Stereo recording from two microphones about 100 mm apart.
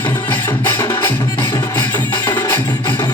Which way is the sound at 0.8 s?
30° left (ahead or behind).